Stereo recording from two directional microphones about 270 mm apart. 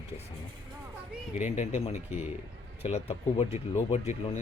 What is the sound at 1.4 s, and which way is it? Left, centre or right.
Speech, left.